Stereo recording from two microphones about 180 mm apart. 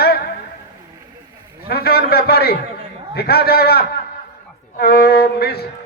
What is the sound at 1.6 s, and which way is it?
A man's voice, 60° left (ahead or behind).